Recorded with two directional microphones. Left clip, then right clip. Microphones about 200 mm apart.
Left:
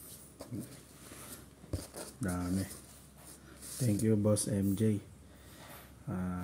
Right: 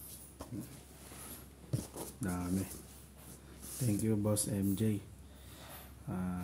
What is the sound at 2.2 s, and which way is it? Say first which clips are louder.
Speech: left 2 dB; 10° left (ahead or behind).